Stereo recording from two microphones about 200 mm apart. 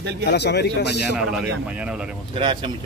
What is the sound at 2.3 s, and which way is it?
Speech, 25° right (ahead or behind).